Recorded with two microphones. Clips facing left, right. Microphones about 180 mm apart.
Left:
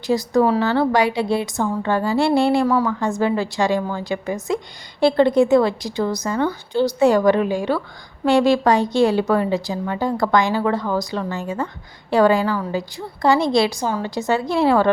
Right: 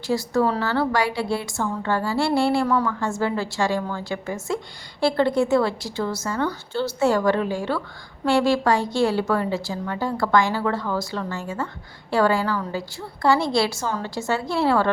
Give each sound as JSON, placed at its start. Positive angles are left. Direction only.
{"t": 0.1, "sound": "a woman's voice", "side_deg": 15}